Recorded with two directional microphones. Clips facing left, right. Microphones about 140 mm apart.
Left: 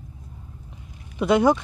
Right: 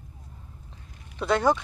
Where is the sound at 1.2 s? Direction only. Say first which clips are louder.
Left 5 dB; 15° left (ahead or behind).